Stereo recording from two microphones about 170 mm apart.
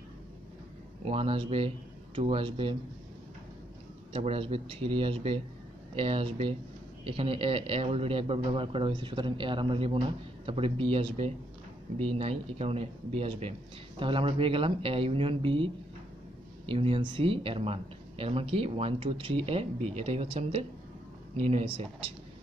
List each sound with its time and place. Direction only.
1.0 s a man's voice: 35° right (ahead or behind)
4.1 s a man's voice: 35° right (ahead or behind)